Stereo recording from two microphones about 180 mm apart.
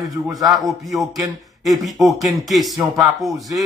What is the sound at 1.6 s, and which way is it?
Speech, centre (ahead or behind).